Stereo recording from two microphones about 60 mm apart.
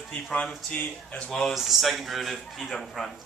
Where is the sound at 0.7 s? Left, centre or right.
Left.